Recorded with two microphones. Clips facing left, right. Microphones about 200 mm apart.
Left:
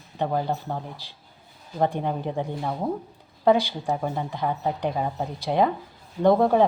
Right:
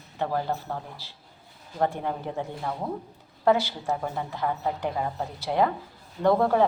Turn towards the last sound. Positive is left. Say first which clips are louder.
# left 3 dB
turn(degrees=15)  # may be behind; listen again after turning